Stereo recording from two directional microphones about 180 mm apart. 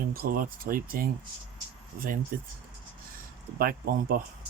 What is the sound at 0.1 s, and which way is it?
Speech, 55° right (ahead or behind).